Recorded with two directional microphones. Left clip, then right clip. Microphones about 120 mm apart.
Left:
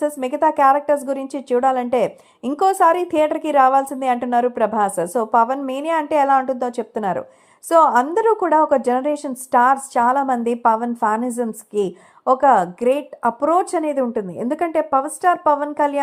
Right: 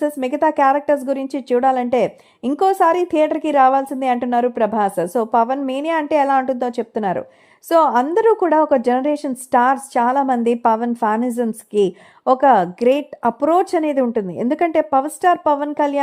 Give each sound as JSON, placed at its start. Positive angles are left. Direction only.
{"t": 0.0, "sound": "a woman's voice", "side_deg": -30}
{"t": 13.7, "sound": "a woman's voice", "side_deg": -40}